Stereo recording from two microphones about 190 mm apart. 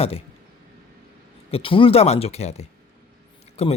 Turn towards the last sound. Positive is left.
turn(degrees=35)  # may be behind; listen again after turning